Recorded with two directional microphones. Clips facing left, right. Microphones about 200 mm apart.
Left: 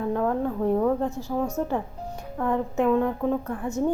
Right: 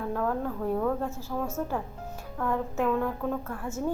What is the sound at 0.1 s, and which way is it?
A woman's voice, 20° left (ahead or behind).